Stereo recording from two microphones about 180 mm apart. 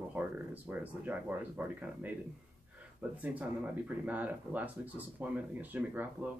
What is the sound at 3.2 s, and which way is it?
Speech, 10° right (ahead or behind).